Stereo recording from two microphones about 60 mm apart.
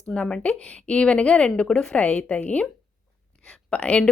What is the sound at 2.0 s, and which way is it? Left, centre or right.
Speech, left.